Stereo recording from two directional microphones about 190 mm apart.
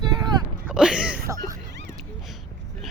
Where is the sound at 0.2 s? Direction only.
20° right (ahead or behind).